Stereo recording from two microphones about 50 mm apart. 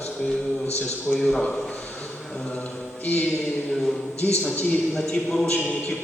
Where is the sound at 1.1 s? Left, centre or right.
Centre.